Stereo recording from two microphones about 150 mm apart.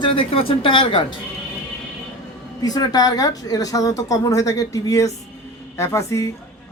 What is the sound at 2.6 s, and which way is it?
A man's voice, 25° left (ahead or behind).